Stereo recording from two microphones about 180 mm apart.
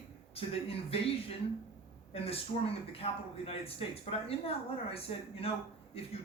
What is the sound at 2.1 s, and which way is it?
Speech, 35° left (ahead or behind).